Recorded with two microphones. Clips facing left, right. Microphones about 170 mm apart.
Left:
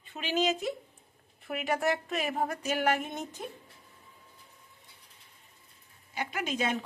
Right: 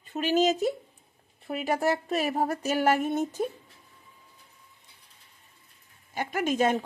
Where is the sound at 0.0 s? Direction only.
40° right (ahead or behind).